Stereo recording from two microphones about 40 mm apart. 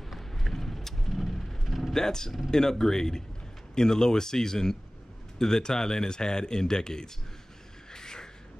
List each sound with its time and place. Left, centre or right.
0.3 s vehicle: centre
2.5 s speech: centre
7.9 s a sound: centre